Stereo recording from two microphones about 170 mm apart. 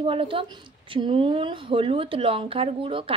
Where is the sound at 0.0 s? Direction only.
30° right (ahead or behind).